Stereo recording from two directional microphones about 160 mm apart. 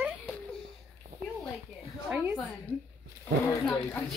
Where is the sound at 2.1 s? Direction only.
15° right (ahead or behind).